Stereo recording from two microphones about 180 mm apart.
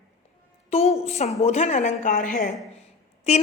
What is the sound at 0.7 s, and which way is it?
A woman's voice, 35° left (ahead or behind).